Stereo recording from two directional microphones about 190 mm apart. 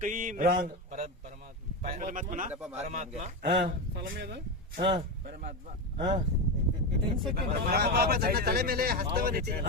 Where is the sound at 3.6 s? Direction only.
60° right (ahead or behind).